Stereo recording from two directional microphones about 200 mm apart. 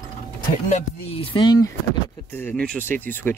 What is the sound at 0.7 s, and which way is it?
Speech, 30° left (ahead or behind).